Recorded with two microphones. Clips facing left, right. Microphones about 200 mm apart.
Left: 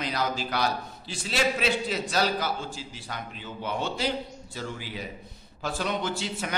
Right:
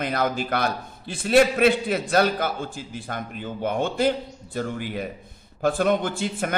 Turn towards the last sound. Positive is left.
turn(degrees=-55)  # may be behind; listen again after turning